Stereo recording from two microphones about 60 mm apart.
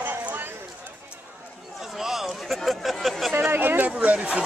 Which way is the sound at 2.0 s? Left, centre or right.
Centre.